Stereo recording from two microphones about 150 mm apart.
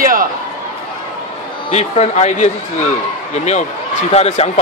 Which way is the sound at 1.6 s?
45° left (ahead or behind).